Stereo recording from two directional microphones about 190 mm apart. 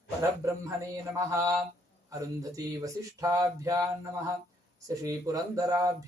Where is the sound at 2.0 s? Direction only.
20° right (ahead or behind).